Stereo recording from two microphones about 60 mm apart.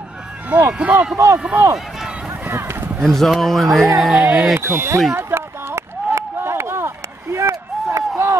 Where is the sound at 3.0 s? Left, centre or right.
Centre.